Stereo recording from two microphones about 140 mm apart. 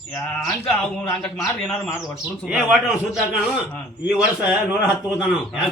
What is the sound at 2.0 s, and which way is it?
A man's voice, 5° right (ahead or behind).